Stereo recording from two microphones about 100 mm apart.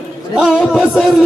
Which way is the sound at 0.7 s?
Centre (ahead or behind).